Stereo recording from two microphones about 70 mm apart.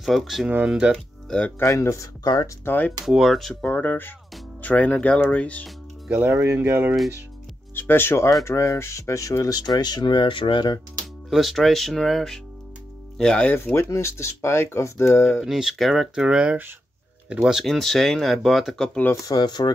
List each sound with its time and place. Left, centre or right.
0.0 s speech: centre
0.7 s speech: centre
1.6 s speech: left
2.6 s speech: left
3.1 s speech: centre
3.6 s speech: left
6.0 s speech: right
7.7 s speech: left
11.2 s speech: centre
13.5 s speech: left
13.8 s speech: left
15.4 s speech: centre
17.6 s speech: centre
19.2 s speech: left